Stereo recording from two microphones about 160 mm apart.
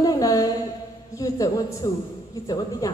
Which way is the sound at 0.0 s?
25° left (ahead or behind).